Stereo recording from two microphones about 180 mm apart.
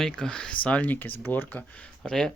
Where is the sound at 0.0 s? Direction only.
5° left (ahead or behind).